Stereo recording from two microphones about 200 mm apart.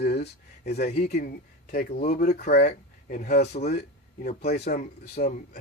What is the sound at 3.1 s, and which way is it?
Speech, 35° left (ahead or behind).